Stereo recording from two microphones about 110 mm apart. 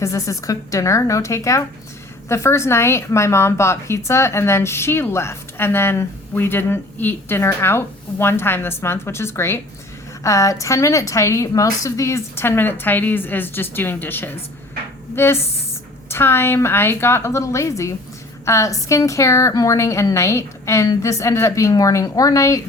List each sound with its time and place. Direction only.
0.0 s a woman's voice: 30° left (ahead or behind)